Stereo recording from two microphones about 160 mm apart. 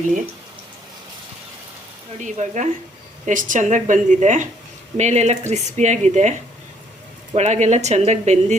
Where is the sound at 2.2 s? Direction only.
50° right (ahead or behind).